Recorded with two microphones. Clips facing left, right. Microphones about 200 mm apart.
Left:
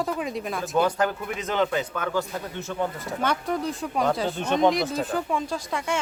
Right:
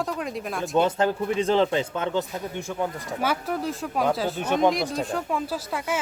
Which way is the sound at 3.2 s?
5° right (ahead or behind).